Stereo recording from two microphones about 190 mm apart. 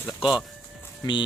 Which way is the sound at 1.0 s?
20° left (ahead or behind).